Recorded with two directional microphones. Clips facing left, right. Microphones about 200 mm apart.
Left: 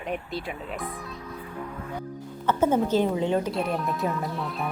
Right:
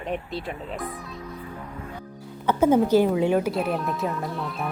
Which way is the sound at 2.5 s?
10° right (ahead or behind).